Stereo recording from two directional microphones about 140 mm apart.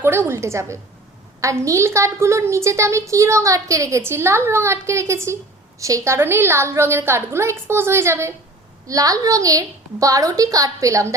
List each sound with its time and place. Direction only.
0.0 s a woman's voice: 15° right (ahead or behind)